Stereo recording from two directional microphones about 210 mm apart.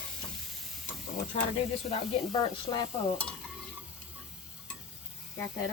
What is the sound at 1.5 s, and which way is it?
Speech, 25° left (ahead or behind).